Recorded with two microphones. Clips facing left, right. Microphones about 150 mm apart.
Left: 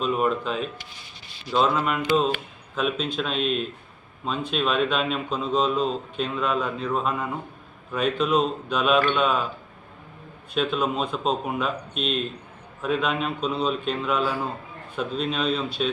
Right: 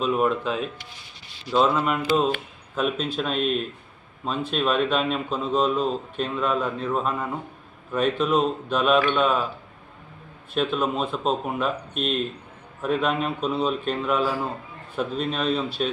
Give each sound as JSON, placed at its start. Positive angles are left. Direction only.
{"t": 0.0, "sound": "a man's voice", "side_deg": 0}
{"t": 10.5, "sound": "a man's voice", "side_deg": 0}